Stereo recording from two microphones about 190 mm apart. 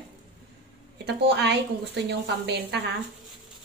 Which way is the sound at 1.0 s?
65° right (ahead or behind).